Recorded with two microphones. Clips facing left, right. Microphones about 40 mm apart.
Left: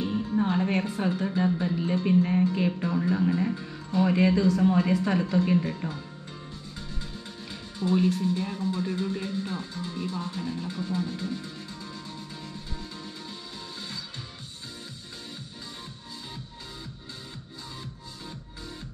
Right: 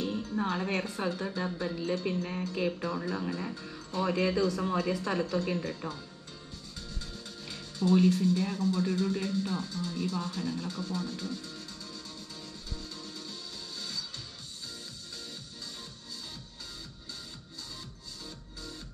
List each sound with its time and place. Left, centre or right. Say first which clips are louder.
0.0 s music: left 5 dB; centre
0.5 s a woman's voice: left 5 dB; centre
7.0 s music: left 4 dB; left
7.9 s a woman's voice: even; centre
13.7 s music: even; left